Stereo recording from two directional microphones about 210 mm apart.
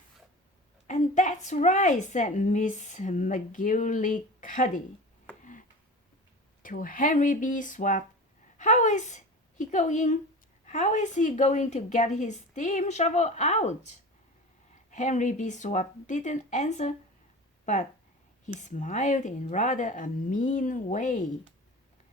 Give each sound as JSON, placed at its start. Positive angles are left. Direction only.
{"t": 0.9, "sound": "a woman's voice", "side_deg": 35}
{"t": 5.4, "sound": "tick-tock", "side_deg": 40}
{"t": 6.6, "sound": "a woman's voice", "side_deg": 40}